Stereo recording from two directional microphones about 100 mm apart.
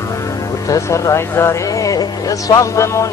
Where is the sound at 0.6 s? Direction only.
30° left (ahead or behind).